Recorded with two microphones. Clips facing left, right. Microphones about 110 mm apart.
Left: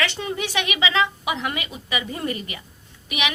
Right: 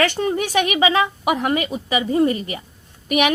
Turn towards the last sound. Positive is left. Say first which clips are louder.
# right 9 dB
turn(degrees=-45)  # may be behind; listen again after turning